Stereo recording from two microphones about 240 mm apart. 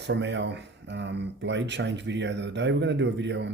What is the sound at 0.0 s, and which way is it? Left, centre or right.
Speech, right.